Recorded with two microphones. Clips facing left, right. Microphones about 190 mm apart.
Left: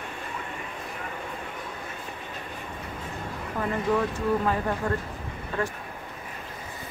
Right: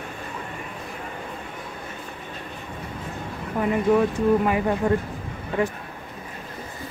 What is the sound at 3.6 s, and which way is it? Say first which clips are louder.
Speech: right 6 dB; 15° right (ahead or behind).